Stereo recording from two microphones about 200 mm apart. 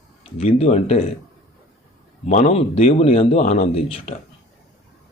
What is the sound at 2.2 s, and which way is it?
A man's voice, 35° left (ahead or behind).